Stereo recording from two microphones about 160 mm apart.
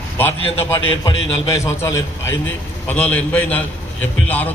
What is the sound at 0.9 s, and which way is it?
A man's voice, 25° left (ahead or behind).